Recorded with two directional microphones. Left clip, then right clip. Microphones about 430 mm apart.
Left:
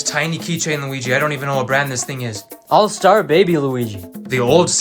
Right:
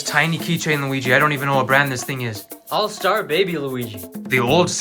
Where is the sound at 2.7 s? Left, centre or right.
Centre.